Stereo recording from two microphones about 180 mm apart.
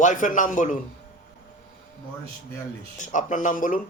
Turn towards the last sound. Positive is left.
turn(degrees=50)  # may be behind; listen again after turning